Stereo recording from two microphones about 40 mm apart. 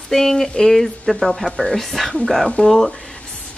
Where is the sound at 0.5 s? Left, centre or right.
Centre.